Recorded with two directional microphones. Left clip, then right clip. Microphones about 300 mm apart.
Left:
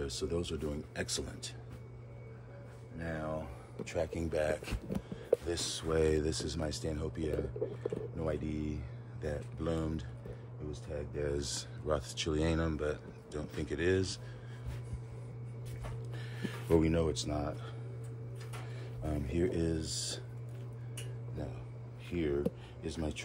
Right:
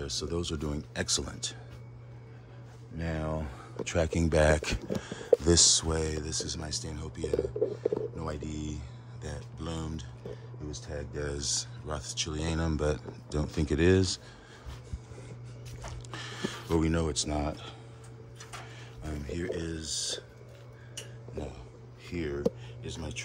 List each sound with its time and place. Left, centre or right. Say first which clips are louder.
0.0 s speech: right 3 dB; centre
3.0 s speech: right 4 dB; right
5.9 s speech: left 2 dB; centre
16.1 s a sound: right 8 dB; right
16.6 s speech: even; centre
19.0 s speech: left 1 dB; centre
22.1 s speech: left 1 dB; centre